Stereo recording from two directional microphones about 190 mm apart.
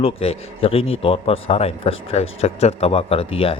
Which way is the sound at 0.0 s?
30° left (ahead or behind).